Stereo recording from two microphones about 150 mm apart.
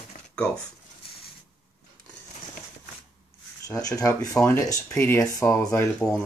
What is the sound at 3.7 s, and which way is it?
Speech, 20° left (ahead or behind).